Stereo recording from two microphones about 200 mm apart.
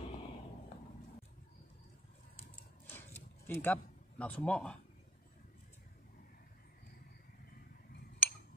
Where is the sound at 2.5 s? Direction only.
10° left (ahead or behind).